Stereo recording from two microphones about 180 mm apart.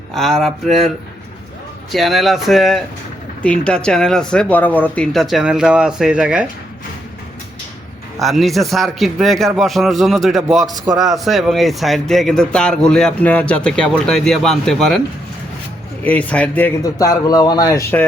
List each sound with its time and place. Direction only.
0.1 s speech: centre (ahead or behind)
1.9 s speech: centre (ahead or behind)
8.2 s speech: centre (ahead or behind)
10.7 s a man's voice: 20° right (ahead or behind)
11.2 s speech: centre (ahead or behind)
16.0 s speech: 10° left (ahead or behind)
16.8 s speech: 20° left (ahead or behind)